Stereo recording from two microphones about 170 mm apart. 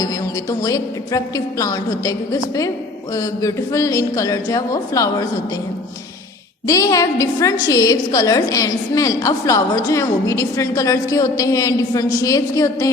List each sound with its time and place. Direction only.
0.6 s a woman's voice: 20° left (ahead or behind)
6.7 s a woman's voice: 20° left (ahead or behind)